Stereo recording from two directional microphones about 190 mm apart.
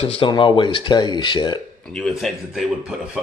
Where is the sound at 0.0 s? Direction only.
30° left (ahead or behind).